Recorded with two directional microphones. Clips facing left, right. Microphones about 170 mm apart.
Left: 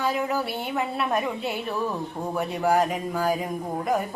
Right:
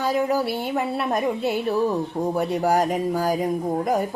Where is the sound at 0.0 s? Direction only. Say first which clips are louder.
Right 4 dB; 40° right (ahead or behind).